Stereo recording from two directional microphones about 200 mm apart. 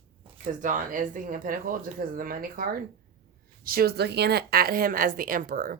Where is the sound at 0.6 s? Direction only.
40° right (ahead or behind).